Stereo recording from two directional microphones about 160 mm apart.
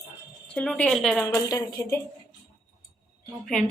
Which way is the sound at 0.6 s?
5° left (ahead or behind).